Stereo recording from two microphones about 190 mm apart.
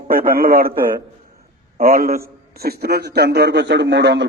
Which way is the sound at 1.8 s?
50° right (ahead or behind).